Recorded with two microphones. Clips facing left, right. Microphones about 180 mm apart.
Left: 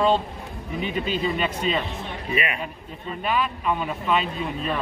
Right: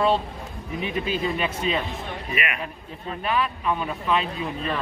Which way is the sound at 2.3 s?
30° left (ahead or behind).